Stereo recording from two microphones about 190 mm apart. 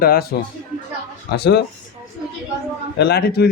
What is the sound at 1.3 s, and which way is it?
Speech, 60° left (ahead or behind).